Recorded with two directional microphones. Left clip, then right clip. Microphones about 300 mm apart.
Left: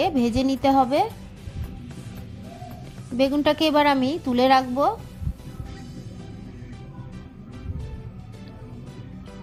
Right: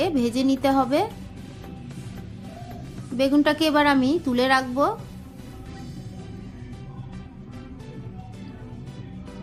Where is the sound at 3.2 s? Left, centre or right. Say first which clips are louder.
Even; left.